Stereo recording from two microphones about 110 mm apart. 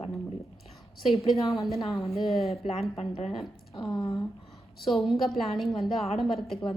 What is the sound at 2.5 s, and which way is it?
Speech, 65° left (ahead or behind).